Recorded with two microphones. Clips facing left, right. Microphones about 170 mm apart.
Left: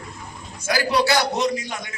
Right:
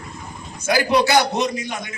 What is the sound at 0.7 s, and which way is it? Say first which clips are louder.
A man's voice: right 3 dB; 20° right (ahead or behind).